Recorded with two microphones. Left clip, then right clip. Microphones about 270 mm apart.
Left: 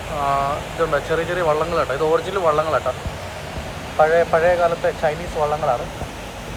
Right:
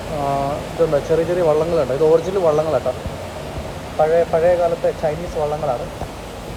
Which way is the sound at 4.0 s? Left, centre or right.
Centre.